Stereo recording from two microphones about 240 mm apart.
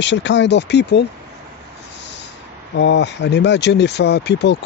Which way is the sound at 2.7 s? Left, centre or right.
Left.